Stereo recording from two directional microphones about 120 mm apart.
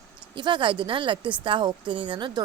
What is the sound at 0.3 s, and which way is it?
A woman's voice, 45° right (ahead or behind).